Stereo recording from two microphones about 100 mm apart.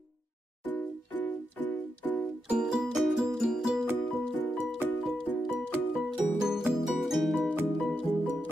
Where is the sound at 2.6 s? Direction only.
5° right (ahead or behind).